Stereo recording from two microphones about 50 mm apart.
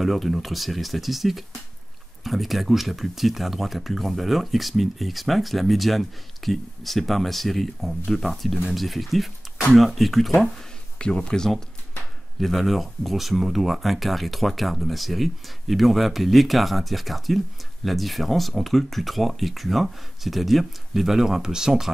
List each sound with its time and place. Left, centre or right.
0.0 s speech: centre
11.0 s speech: centre